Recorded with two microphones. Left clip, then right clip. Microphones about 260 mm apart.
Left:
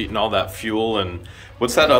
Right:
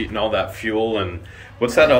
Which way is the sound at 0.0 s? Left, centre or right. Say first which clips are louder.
Even; centre.